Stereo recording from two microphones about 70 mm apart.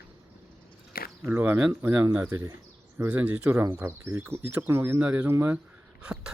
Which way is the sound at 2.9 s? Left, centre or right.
Right.